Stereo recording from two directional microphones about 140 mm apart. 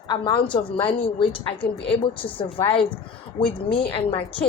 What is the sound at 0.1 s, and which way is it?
A woman's voice, 35° left (ahead or behind).